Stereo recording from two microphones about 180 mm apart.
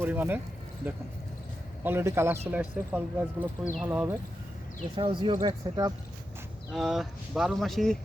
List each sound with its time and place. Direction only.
0.0 s speech: 10° right (ahead or behind)
1.8 s speech: 10° right (ahead or behind)
4.9 s speech: 25° right (ahead or behind)
6.7 s speech: centre (ahead or behind)